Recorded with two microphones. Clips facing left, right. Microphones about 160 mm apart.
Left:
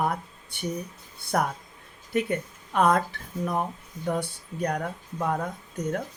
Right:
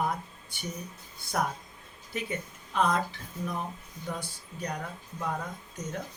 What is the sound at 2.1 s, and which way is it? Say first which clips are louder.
Speech: left 8 dB; 60° left (ahead or behind).